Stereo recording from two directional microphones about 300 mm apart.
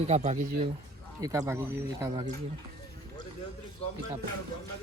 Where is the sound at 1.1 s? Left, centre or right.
Centre.